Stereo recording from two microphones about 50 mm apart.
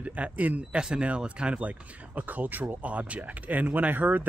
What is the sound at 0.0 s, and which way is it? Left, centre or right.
Speech, right.